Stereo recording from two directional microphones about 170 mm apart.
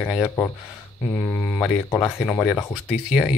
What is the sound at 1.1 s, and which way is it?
Speech, 10° left (ahead or behind).